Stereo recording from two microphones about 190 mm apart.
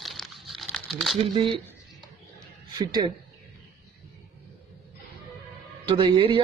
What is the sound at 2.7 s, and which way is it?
Speech, 20° right (ahead or behind).